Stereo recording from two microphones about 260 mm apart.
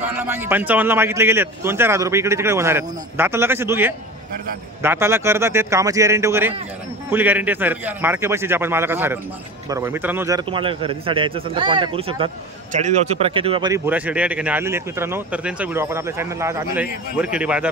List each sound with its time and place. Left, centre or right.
0.0 s a man's voice: centre